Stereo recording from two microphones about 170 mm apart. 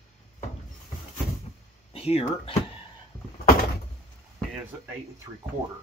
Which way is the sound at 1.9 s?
35° left (ahead or behind).